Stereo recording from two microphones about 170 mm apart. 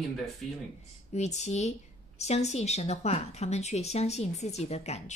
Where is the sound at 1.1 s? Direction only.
40° left (ahead or behind).